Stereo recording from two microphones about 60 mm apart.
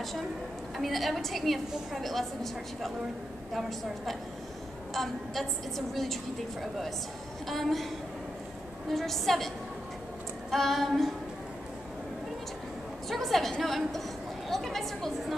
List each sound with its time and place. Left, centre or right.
0.7 s a woman's voice: centre
7.4 s a woman's voice: centre
8.9 s a woman's voice: centre
10.5 s a woman's voice: centre
13.1 s a woman's voice: centre